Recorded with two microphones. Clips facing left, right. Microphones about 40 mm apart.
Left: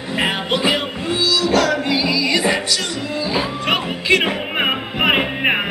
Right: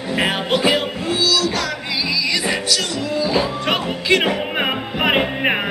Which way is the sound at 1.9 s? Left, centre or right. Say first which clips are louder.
Left 3 dB; left.